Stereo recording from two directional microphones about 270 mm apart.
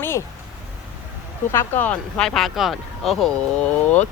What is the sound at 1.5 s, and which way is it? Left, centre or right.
Speech, centre.